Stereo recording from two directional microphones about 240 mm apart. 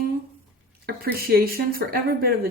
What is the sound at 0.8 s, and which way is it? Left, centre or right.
Speech, right.